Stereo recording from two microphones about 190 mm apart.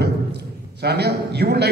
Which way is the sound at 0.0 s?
60° right (ahead or behind).